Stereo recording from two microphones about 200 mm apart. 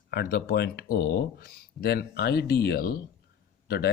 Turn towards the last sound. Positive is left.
turn(degrees=55)  # may be behind; listen again after turning